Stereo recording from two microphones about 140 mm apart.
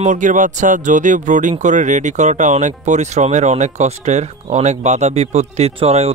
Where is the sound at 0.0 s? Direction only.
65° right (ahead or behind).